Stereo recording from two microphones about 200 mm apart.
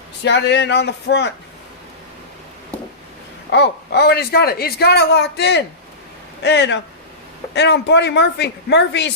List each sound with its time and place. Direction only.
0.3 s speech: 60° left (ahead or behind)
3.5 s speech: 55° left (ahead or behind)